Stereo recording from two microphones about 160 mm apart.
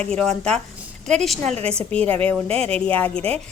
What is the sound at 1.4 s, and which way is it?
Speech, 45° right (ahead or behind).